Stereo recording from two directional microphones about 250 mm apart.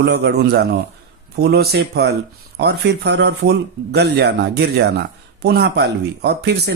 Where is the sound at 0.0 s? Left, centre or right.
Right.